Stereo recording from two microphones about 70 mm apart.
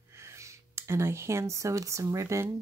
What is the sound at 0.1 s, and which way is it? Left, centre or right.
Speech, right.